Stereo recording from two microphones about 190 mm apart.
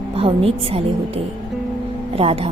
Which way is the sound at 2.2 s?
30° right (ahead or behind).